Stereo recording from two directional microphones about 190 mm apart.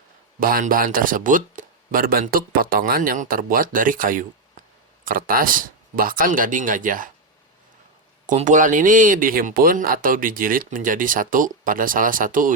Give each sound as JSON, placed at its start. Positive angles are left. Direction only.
{"t": 0.3, "sound": "speech", "side_deg": -50}
{"t": 8.3, "sound": "speech", "side_deg": -40}